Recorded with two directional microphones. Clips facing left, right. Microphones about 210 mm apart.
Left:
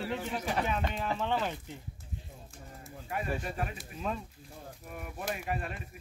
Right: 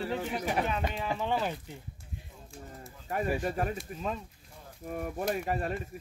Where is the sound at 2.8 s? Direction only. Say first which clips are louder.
Right 3 dB; 40° right (ahead or behind).